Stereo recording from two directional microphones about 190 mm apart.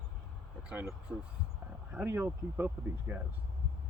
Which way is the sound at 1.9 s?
10° right (ahead or behind).